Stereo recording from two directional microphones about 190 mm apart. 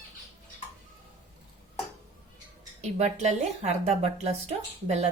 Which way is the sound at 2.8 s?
35° right (ahead or behind).